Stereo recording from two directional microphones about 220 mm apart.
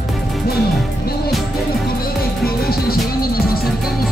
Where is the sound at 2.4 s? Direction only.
45° left (ahead or behind).